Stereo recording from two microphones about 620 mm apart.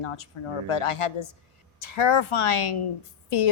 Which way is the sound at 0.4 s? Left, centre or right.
Left.